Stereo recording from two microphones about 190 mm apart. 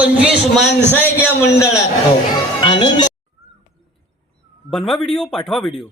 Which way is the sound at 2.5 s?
25° left (ahead or behind).